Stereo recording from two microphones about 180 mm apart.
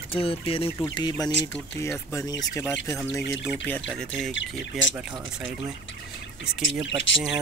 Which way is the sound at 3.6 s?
5° left (ahead or behind).